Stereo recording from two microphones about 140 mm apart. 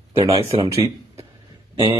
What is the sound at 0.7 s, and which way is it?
Speech, 20° right (ahead or behind).